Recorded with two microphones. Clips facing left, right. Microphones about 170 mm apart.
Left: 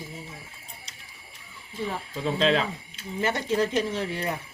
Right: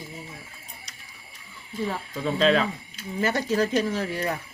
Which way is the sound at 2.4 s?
25° left (ahead or behind).